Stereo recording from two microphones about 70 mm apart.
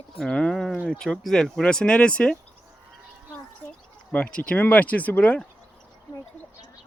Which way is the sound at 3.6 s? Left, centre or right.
Left.